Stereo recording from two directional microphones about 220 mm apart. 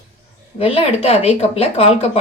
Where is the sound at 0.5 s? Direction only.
25° left (ahead or behind).